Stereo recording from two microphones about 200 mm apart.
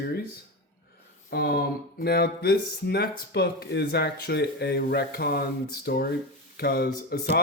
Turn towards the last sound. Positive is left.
turn(degrees=50)  # may be behind; listen again after turning